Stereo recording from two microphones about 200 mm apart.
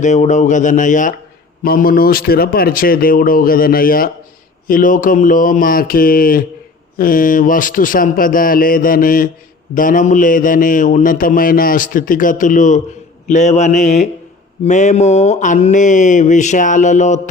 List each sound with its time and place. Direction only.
0.0 s a man's voice: 35° left (ahead or behind)